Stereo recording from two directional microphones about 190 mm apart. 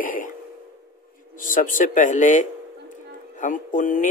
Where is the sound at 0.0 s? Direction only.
45° left (ahead or behind).